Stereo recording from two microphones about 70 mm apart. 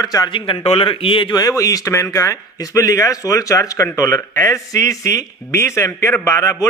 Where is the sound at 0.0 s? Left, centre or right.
Left.